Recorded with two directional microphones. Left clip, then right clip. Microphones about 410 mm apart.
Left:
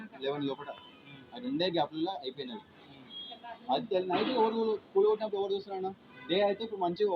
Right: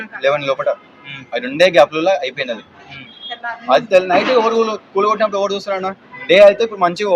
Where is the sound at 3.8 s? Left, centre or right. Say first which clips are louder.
Right 19 dB; centre.